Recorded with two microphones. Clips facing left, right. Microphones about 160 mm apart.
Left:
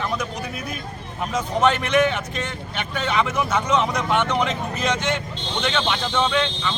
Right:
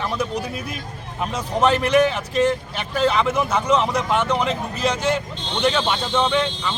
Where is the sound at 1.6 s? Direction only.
35° right (ahead or behind).